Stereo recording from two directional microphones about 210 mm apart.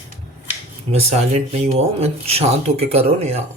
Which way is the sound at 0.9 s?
30° right (ahead or behind).